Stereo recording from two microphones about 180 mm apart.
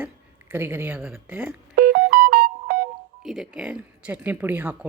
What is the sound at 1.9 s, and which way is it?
Music, 55° right (ahead or behind).